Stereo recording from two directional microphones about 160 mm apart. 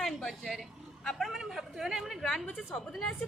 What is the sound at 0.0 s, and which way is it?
A woman's voice, centre (ahead or behind).